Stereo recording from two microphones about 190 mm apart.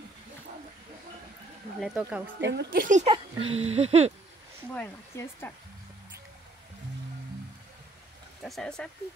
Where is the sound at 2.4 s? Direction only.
65° right (ahead or behind); by 4.1 s 35° right (ahead or behind).